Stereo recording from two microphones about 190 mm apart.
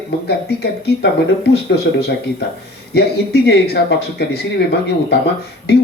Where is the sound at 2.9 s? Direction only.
60° left (ahead or behind).